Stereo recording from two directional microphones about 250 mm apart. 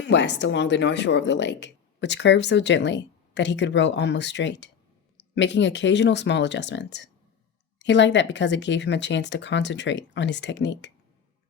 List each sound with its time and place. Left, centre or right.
0.0 s speech: left